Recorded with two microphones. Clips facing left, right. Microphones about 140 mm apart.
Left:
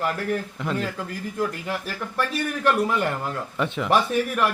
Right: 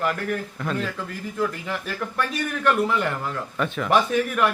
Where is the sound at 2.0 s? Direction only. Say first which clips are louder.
Right 3 dB; centre (ahead or behind).